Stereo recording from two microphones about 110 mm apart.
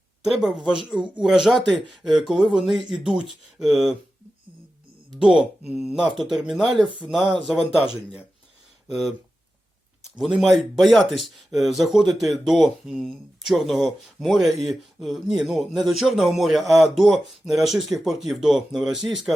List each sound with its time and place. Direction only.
0.3 s speech: 5° right (ahead or behind)
5.1 s speech: 5° right (ahead or behind)
8.9 s speech: centre (ahead or behind)
10.2 s speech: centre (ahead or behind)